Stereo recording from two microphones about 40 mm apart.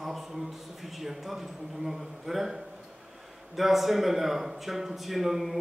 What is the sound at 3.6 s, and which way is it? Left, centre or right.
A man's voice, centre.